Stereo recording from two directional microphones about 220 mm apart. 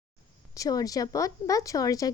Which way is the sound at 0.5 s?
15° left (ahead or behind).